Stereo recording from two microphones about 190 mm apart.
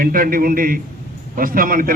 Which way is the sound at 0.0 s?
50° right (ahead or behind).